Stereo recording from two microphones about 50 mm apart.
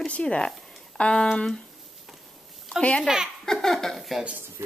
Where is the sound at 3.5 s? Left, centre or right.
Centre.